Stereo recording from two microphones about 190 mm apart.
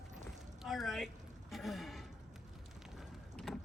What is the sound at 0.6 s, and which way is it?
Speech, centre (ahead or behind).